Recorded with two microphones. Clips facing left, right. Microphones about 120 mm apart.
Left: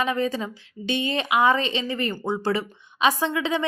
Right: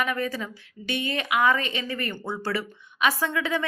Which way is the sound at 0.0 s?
25° left (ahead or behind).